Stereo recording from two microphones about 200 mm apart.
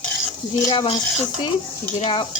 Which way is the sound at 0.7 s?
25° left (ahead or behind).